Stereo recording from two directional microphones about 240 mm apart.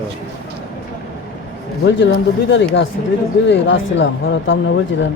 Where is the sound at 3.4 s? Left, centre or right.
Left.